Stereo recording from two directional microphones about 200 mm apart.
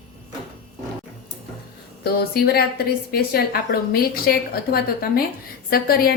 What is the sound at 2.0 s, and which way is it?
A woman's voice, 50° left (ahead or behind).